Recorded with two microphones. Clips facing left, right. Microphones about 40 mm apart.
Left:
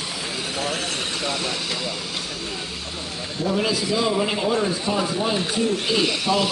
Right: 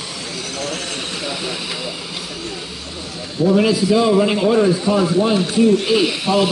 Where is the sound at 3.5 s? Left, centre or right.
Right.